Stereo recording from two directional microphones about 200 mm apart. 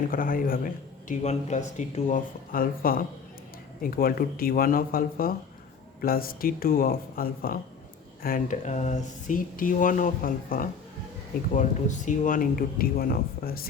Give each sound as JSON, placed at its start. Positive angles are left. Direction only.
{"t": 0.1, "sound": "a man's voice", "side_deg": 45}